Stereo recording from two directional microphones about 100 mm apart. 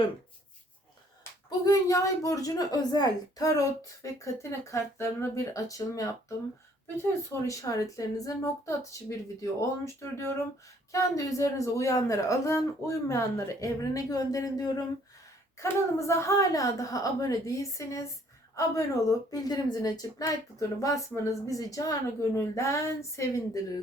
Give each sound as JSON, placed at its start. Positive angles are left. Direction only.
{"t": 1.5, "sound": "speech", "side_deg": 35}
{"t": 15.6, "sound": "speech", "side_deg": 30}
{"t": 19.3, "sound": "speech", "side_deg": 40}